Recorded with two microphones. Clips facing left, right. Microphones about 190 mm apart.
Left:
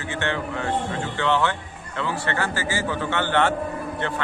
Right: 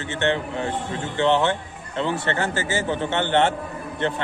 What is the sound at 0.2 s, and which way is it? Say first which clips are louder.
A man's voice: right 4 dB; 20° right (ahead or behind).